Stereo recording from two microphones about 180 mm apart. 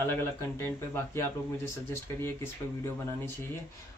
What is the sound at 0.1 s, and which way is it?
Speech, 15° left (ahead or behind).